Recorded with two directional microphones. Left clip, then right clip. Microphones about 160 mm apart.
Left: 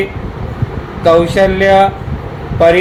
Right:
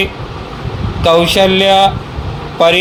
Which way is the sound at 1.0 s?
35° right (ahead or behind).